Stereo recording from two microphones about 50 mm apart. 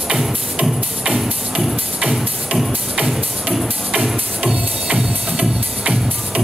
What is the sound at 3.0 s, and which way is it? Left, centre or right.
Music, centre.